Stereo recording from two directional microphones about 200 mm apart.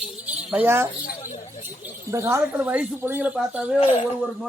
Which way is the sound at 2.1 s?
15° right (ahead or behind).